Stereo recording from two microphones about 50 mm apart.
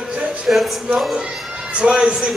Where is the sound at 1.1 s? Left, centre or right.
Right.